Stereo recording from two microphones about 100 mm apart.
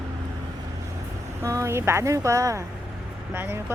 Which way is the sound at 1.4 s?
30° right (ahead or behind).